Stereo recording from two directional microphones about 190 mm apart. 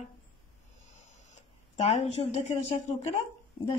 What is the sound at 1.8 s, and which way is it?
Speech, 35° left (ahead or behind).